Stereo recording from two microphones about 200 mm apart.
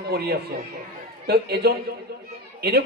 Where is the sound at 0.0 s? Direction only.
50° right (ahead or behind).